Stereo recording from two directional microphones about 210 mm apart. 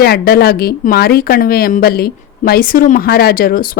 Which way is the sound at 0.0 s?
45° left (ahead or behind).